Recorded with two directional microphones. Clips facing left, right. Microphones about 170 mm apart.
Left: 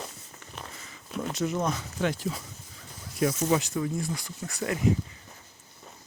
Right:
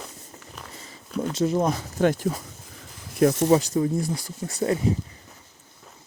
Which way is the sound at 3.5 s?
35° right (ahead or behind).